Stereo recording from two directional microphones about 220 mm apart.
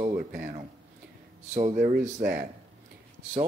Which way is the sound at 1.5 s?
35° right (ahead or behind).